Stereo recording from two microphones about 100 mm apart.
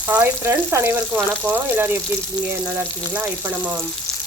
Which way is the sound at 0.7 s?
25° right (ahead or behind).